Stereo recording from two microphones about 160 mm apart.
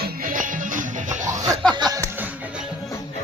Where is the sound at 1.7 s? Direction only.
25° right (ahead or behind).